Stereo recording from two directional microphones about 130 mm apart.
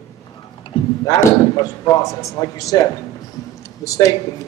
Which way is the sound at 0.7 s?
45° left (ahead or behind).